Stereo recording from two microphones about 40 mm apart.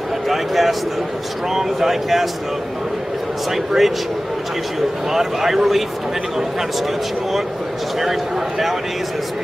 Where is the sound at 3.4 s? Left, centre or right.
Centre.